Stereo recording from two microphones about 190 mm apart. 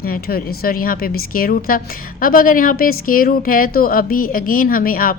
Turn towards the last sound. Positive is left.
turn(degrees=50)  # may be behind; listen again after turning